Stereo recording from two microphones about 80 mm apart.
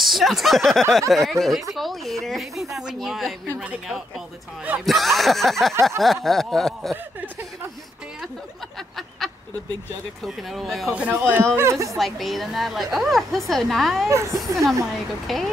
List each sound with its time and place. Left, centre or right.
0.0 s a woman's voice: centre
4.8 s a woman's voice: centre
10.2 s a woman's voice: centre
11.0 s speech: right
11.5 s speech: right
12.0 s a woman's voice: centre
14.0 s speech: right
14.3 s a woman's voice: centre